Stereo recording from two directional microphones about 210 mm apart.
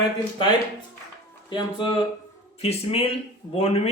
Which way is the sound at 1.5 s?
20° left (ahead or behind).